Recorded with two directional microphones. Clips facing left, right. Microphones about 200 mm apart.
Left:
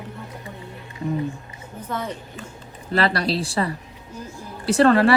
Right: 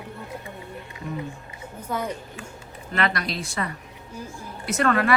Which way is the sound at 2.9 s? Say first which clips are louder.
Left 5 dB; 30° left (ahead or behind).